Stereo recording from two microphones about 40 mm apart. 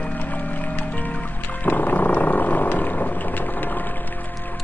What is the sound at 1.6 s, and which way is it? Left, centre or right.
Wild animals, left.